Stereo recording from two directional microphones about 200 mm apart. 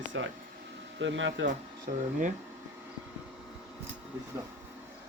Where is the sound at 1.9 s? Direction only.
40° right (ahead or behind).